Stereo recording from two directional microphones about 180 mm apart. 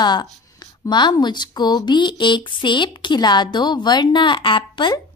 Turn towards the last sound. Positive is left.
turn(degrees=25)  # may be behind; listen again after turning